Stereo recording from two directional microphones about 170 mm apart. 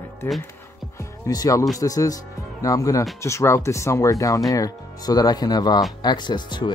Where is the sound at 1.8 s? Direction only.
20° left (ahead or behind).